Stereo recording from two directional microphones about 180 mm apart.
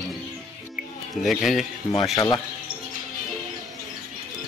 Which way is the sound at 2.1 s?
20° left (ahead or behind).